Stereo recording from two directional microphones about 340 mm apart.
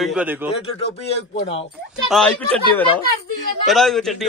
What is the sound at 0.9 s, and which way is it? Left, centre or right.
Speech, centre.